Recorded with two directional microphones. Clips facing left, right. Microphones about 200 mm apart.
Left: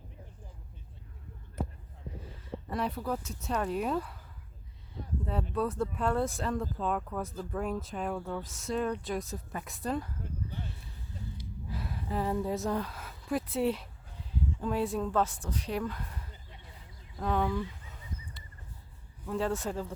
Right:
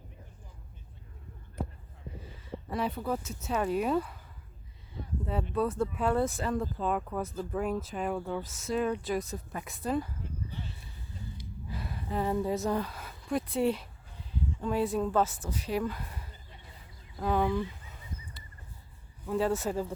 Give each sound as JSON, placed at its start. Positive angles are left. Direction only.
{"t": 2.4, "sound": "speech", "side_deg": 0}
{"t": 5.5, "sound": "speech", "side_deg": 0}
{"t": 11.7, "sound": "a sound", "side_deg": 0}
{"t": 14.7, "sound": "speech", "side_deg": 0}
{"t": 17.7, "sound": "a sound", "side_deg": -5}
{"t": 19.3, "sound": "speech", "side_deg": -5}